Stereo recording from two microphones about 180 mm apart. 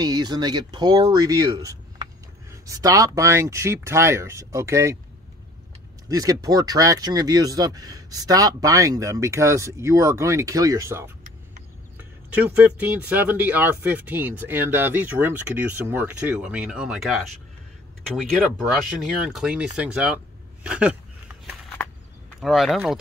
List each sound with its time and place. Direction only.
0.0 s speech: 20° right (ahead or behind)
6.0 s speech: 20° right (ahead or behind); by 17.3 s centre (ahead or behind)
18.9 s speech: 5° right (ahead or behind)
22.4 s speech: centre (ahead or behind)